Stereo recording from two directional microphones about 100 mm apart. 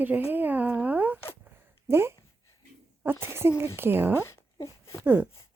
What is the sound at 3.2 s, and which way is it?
Speech, 25° right (ahead or behind).